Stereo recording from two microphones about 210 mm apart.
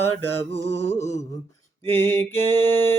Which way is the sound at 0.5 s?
30° left (ahead or behind).